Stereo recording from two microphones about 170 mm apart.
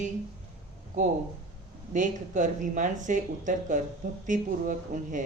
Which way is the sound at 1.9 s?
50° right (ahead or behind).